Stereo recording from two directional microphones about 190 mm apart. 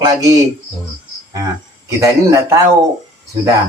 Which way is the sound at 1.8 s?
15° right (ahead or behind).